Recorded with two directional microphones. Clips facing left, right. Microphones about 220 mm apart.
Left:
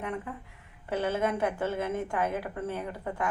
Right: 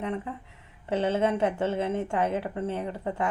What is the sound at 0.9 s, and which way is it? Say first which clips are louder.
Speech: right 3 dB; 25° right (ahead or behind).